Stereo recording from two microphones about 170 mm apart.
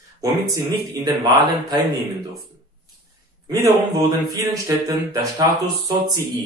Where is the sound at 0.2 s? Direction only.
25° right (ahead or behind).